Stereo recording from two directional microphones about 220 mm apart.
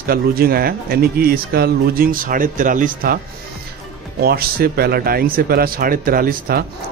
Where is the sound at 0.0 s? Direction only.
45° right (ahead or behind).